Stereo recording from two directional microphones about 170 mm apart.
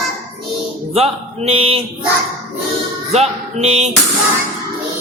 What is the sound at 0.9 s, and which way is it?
Music, 35° right (ahead or behind).